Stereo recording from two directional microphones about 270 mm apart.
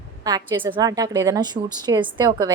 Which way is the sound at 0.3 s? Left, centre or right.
Centre.